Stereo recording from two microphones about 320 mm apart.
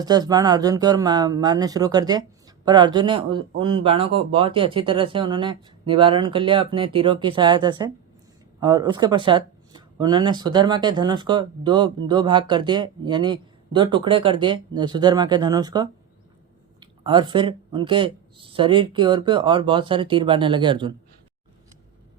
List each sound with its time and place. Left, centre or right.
0.0 s speech: centre